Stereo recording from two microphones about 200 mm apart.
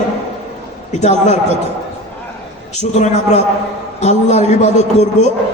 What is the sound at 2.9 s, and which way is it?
A man's voice, 35° left (ahead or behind).